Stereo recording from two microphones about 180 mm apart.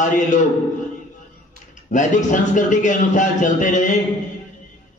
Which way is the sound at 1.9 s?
45° left (ahead or behind).